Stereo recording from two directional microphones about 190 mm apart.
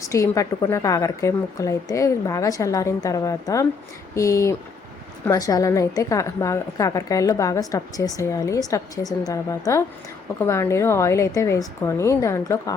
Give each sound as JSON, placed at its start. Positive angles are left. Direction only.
{"t": 0.0, "sound": "a woman's voice", "side_deg": 15}